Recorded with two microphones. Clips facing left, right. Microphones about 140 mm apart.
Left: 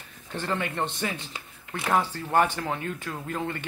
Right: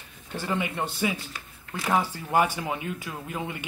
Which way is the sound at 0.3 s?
10° right (ahead or behind).